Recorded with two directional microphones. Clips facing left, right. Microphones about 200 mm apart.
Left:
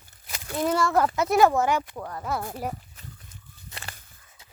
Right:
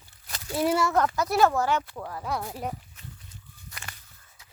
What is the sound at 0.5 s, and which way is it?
Speech, 5° right (ahead or behind).